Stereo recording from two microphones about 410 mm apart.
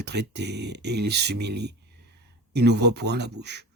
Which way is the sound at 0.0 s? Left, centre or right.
Right.